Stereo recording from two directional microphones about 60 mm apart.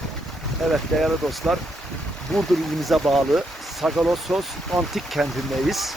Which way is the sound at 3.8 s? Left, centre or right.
Right.